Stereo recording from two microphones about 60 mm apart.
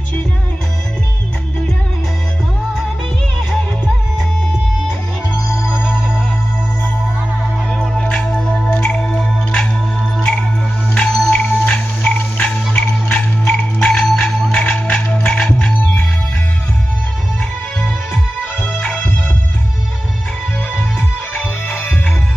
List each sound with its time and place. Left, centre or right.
5.7 s music: centre
7.7 s music: centre
14.7 s music: left